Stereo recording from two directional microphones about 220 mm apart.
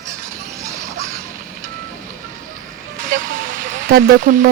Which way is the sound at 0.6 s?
15° right (ahead or behind).